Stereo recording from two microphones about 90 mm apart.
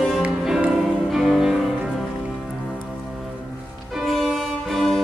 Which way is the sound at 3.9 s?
Centre (ahead or behind).